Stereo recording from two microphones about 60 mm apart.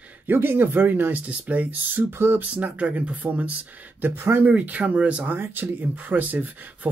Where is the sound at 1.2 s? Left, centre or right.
Right.